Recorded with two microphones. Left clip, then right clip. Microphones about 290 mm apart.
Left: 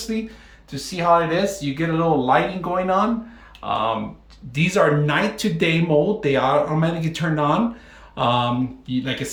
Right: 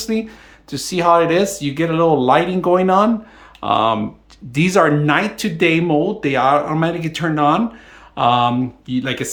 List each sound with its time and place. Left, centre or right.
0.0 s speech: centre